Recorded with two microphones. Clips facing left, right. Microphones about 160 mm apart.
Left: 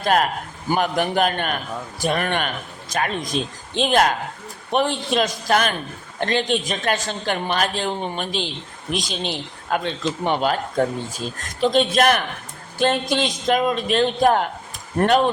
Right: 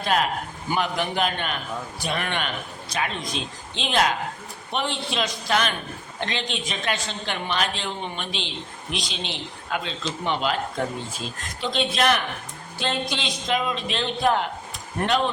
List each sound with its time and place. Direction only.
0.0 s a man's voice: 50° left (ahead or behind)
11.6 s a woman's voice: 45° left (ahead or behind)